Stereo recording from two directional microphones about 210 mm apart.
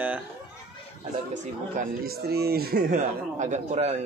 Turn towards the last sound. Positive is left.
turn(degrees=-35)  # may be behind; listen again after turning